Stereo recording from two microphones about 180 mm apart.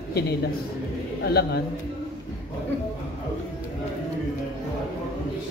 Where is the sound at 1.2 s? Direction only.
65° left (ahead or behind).